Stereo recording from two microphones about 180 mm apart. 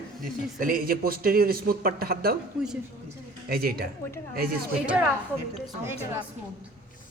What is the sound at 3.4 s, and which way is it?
Speech, 55° right (ahead or behind).